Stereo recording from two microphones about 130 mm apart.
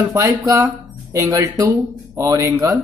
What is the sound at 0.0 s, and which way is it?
Speech, 20° right (ahead or behind).